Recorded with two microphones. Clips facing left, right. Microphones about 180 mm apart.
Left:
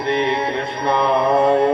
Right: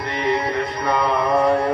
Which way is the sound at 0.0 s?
25° left (ahead or behind).